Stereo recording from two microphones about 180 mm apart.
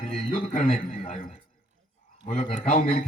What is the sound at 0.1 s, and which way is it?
A man's voice, 40° left (ahead or behind).